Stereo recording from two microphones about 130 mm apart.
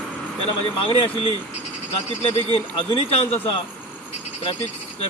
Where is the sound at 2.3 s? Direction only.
45° left (ahead or behind).